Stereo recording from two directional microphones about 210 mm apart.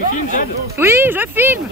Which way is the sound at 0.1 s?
40° left (ahead or behind).